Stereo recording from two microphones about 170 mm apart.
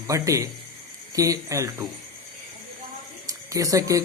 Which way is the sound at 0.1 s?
20° right (ahead or behind).